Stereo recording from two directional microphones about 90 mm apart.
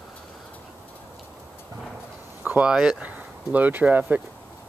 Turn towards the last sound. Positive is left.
turn(degrees=-20)  # may be behind; listen again after turning